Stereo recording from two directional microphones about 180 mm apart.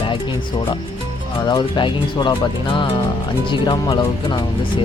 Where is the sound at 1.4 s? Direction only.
25° left (ahead or behind).